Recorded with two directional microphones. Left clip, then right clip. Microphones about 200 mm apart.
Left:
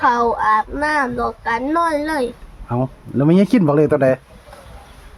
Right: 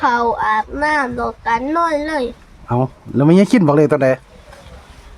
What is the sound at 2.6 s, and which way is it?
A man's voice, 20° right (ahead or behind).